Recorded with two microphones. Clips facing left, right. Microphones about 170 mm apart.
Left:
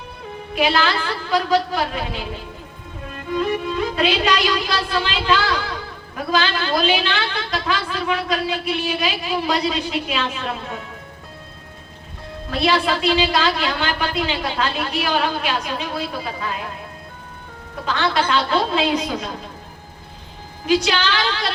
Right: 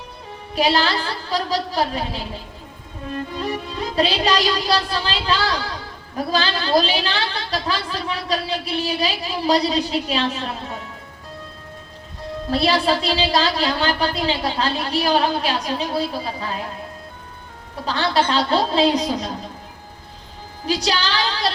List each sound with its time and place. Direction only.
0.5 s a woman's voice: 35° right (ahead or behind)
3.3 s a woman's voice: 35° right (ahead or behind)
12.5 s a woman's voice: 35° right (ahead or behind)
17.8 s a woman's voice: 35° right (ahead or behind)
20.7 s a woman's voice: 35° right (ahead or behind)